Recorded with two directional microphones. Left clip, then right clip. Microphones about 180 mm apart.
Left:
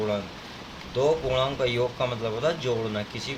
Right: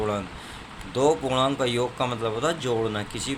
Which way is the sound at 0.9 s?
35° right (ahead or behind).